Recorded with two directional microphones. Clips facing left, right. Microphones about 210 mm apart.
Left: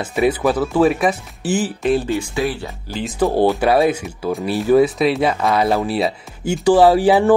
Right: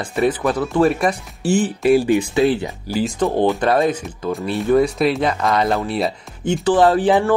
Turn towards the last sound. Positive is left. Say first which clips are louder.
# left 3 dB
turn(degrees=10)  # may be behind; listen again after turning